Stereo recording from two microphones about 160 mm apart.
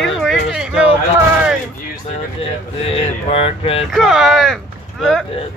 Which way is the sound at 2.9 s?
35° left (ahead or behind).